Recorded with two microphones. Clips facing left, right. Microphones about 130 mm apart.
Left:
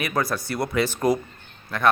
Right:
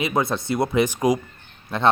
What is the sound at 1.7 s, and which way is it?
Speech, 25° right (ahead or behind).